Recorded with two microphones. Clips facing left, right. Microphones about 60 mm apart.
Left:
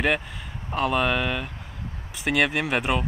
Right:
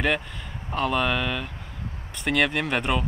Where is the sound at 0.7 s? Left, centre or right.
Centre.